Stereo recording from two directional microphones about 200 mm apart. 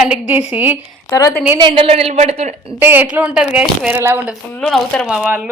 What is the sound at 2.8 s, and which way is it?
Speech, 10° right (ahead or behind).